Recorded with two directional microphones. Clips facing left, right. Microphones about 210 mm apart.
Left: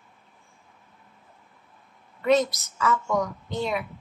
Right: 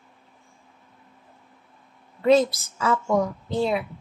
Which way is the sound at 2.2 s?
30° right (ahead or behind).